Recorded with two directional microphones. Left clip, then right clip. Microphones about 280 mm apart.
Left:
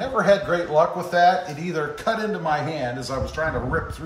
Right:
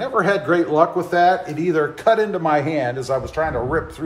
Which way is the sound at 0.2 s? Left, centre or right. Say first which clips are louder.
Right 1 dB; centre.